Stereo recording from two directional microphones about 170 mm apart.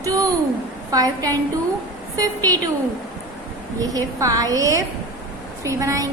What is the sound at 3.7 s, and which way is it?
A woman's voice, 20° right (ahead or behind).